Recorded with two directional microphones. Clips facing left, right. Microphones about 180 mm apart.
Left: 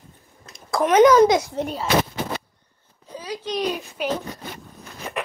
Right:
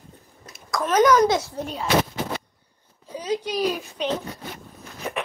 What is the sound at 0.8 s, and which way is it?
Speech, 20° left (ahead or behind).